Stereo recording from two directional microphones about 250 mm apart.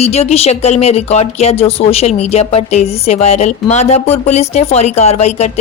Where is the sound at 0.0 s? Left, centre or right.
Left.